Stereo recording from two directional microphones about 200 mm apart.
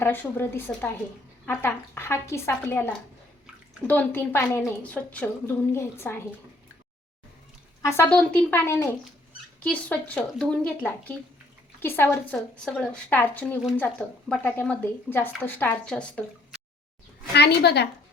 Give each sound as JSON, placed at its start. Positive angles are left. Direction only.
{"t": 0.0, "sound": "a woman's voice", "side_deg": 10}
{"t": 7.8, "sound": "a woman's voice", "side_deg": 15}
{"t": 17.3, "sound": "a woman's voice", "side_deg": 55}